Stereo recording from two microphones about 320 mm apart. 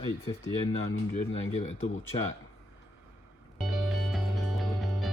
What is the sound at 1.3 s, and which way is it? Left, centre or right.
Speech, centre.